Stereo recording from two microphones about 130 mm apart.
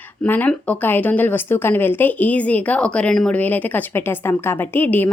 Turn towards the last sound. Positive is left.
turn(degrees=15)  # may be behind; listen again after turning